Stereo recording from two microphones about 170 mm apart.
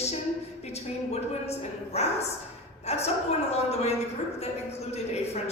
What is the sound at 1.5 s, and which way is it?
Speech, 40° left (ahead or behind).